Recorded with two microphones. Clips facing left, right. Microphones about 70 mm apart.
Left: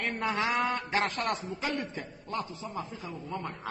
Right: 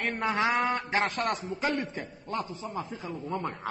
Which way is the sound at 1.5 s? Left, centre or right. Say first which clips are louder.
Right 3 dB; right.